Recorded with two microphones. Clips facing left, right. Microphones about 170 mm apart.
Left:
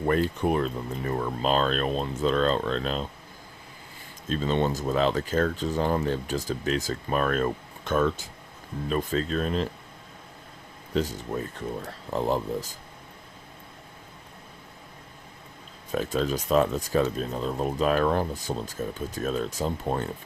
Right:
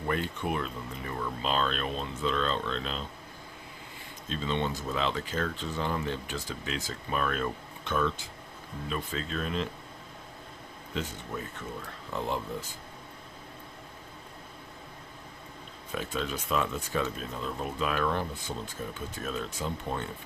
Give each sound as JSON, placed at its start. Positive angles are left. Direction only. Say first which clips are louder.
{"t": 0.0, "sound": "speech", "louder": "left 7 dB", "side_deg": 40}
{"t": 4.3, "sound": "speech", "louder": "left 6 dB", "side_deg": 40}
{"t": 10.9, "sound": "speech", "louder": "left 8 dB", "side_deg": 40}
{"t": 15.9, "sound": "speech", "louder": "left 7 dB", "side_deg": 40}